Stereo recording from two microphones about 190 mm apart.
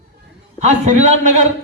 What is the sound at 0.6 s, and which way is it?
Speech, 35° right (ahead or behind).